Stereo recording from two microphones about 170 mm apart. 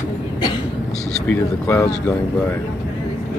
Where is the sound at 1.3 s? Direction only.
15° left (ahead or behind).